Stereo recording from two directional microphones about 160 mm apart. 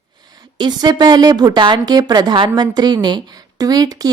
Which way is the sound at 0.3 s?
25° right (ahead or behind).